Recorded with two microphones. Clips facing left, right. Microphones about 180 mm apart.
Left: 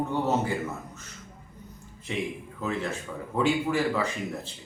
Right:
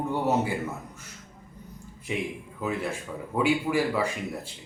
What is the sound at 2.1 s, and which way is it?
A man's voice, 10° right (ahead or behind).